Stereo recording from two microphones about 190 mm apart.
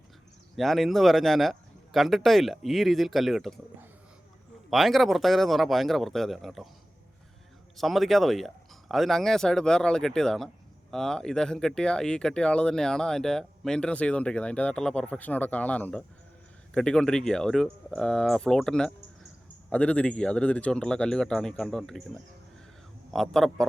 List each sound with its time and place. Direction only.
0.5 s speech: centre (ahead or behind)
7.8 s speech: centre (ahead or behind)